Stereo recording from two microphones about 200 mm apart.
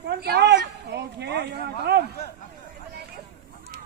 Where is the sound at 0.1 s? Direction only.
55° right (ahead or behind).